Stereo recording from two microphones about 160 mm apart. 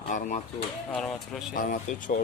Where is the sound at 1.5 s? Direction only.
55° left (ahead or behind).